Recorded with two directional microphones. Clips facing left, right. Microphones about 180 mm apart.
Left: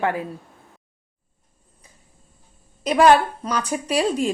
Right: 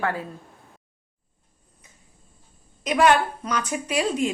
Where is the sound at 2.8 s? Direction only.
35° left (ahead or behind).